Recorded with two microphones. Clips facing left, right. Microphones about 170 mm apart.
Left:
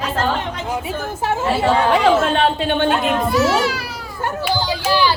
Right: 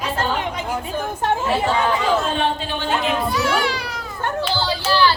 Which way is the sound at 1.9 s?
70° left (ahead or behind).